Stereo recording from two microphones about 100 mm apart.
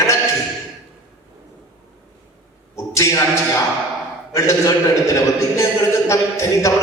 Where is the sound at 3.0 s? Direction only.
30° left (ahead or behind).